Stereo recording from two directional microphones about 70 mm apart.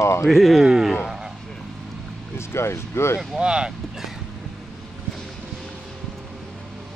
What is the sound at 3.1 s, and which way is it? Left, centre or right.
Speech, centre.